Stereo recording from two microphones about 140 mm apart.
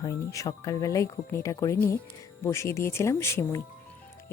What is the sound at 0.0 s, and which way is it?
Speech, 25° left (ahead or behind).